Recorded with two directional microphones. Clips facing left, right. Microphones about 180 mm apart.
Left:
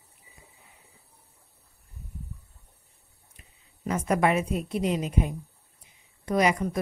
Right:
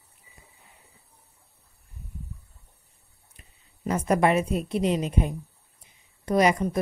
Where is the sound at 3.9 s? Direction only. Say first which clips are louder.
Right 2 dB; 35° right (ahead or behind).